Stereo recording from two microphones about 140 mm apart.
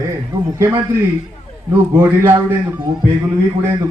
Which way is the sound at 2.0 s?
20° right (ahead or behind).